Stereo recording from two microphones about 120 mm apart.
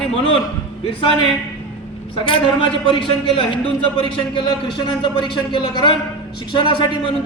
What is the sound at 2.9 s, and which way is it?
Speech, 50° left (ahead or behind).